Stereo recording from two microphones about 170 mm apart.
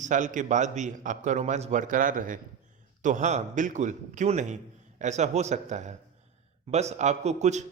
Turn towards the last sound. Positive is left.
turn(degrees=-45)  # may be behind; listen again after turning